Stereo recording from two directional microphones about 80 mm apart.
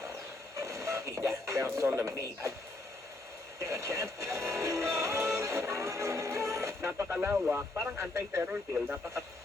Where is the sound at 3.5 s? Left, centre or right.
Right.